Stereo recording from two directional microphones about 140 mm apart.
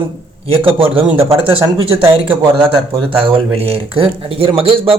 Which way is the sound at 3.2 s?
45° right (ahead or behind).